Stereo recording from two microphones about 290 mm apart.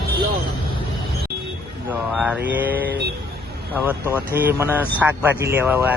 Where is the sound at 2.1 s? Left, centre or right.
Centre.